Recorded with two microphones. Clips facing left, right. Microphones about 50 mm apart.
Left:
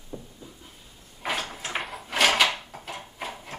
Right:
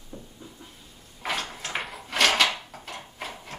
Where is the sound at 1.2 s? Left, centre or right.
Centre.